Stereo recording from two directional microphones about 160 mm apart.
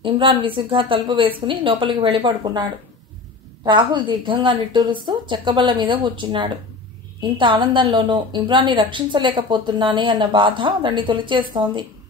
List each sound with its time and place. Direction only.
0.0 s a woman's voice: 30° right (ahead or behind)
3.6 s a woman's voice: 30° right (ahead or behind)